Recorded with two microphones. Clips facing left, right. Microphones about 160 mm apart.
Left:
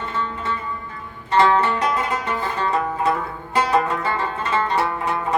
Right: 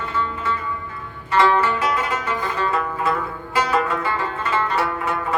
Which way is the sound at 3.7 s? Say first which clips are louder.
Left 1 dB; 30° left (ahead or behind).